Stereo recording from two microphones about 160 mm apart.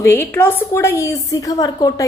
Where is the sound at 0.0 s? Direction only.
15° left (ahead or behind).